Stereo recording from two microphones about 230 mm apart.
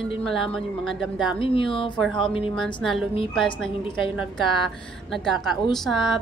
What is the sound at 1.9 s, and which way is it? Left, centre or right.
A woman's voice, centre.